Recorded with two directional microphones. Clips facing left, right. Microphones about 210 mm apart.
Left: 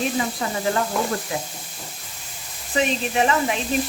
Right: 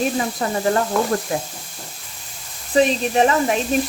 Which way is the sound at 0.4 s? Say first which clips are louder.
Right 7 dB; 45° right (ahead or behind).